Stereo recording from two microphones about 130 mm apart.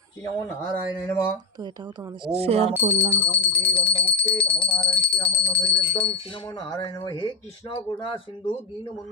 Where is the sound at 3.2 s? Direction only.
45° left (ahead or behind).